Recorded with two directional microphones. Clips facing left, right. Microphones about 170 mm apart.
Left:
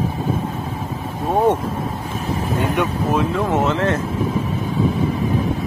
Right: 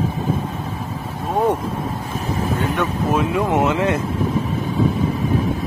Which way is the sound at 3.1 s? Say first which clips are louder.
Right 3 dB; 5° right (ahead or behind).